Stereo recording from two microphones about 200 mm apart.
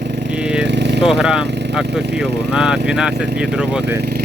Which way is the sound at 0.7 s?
60° right (ahead or behind).